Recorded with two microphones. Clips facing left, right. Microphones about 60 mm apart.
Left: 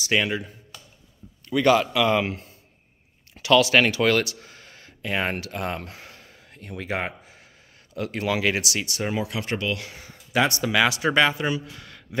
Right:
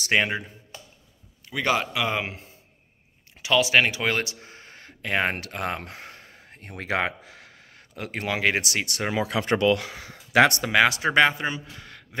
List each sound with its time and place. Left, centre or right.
0.0 s speech: right
1.5 s a man's voice: centre; by 6.9 s right
6.9 s a sound: right
7.9 s speech: right
8.8 s speech: right
10.3 s speech: right
10.6 s speech: right